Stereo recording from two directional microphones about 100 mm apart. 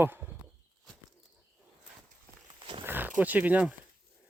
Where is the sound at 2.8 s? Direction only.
20° right (ahead or behind).